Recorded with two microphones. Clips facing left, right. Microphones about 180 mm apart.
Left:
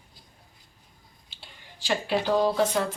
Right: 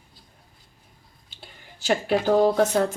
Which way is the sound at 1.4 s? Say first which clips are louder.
Right 3 dB; 45° right (ahead or behind).